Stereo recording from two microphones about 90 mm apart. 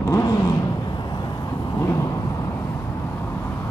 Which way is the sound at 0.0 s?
40° left (ahead or behind).